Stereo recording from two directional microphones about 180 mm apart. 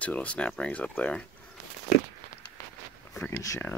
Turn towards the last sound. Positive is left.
turn(degrees=15)  # may be behind; listen again after turning